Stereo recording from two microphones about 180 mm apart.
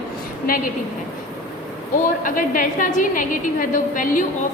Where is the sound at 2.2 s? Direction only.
50° left (ahead or behind).